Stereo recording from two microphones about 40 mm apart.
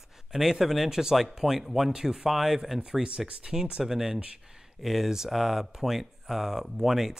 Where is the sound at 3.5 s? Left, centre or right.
Centre.